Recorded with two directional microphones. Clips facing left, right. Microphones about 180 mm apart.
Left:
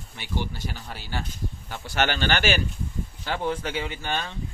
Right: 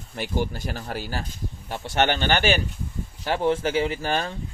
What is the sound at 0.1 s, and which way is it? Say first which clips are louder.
Speech: right 5 dB; 45° right (ahead or behind).